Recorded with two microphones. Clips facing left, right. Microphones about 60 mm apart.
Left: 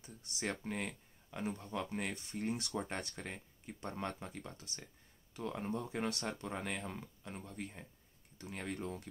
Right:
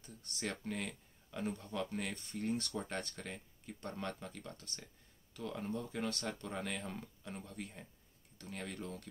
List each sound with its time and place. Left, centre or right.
0.4 s speech: centre
5.4 s speech: left
6.0 s speech: centre